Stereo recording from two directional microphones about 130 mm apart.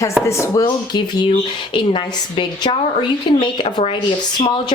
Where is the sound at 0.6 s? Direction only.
35° left (ahead or behind).